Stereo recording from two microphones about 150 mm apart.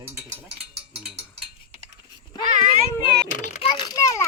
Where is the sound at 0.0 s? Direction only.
20° right (ahead or behind).